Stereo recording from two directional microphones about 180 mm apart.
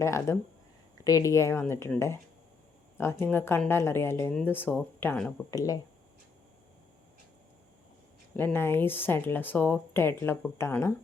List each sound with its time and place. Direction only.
0.0 s speech: 15° left (ahead or behind)
5.5 s speech: 20° left (ahead or behind)
8.4 s speech: 10° left (ahead or behind)